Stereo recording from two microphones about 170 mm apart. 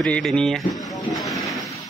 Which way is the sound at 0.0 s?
5° left (ahead or behind).